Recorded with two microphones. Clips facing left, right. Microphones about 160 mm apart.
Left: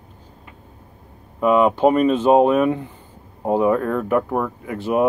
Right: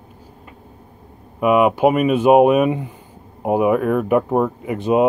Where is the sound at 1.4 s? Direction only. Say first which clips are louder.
Right 1 dB; 10° right (ahead or behind).